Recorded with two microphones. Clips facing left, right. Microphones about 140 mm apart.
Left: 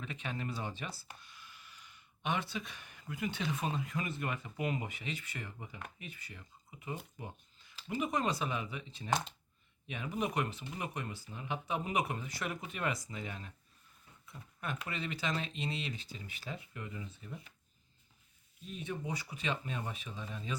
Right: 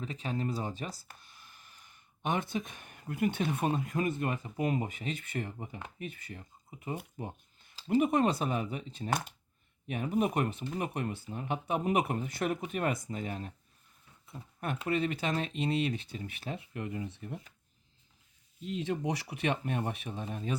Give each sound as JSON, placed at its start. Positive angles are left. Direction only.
{"t": 0.0, "sound": "speech", "side_deg": -35}
{"t": 7.2, "sound": "a sound", "side_deg": -45}
{"t": 7.9, "sound": "speech", "side_deg": -55}
{"t": 14.8, "sound": "speech", "side_deg": -50}
{"t": 17.1, "sound": "speech", "side_deg": -65}
{"t": 18.6, "sound": "speech", "side_deg": -90}